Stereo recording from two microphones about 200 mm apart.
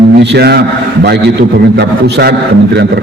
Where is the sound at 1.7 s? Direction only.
55° right (ahead or behind).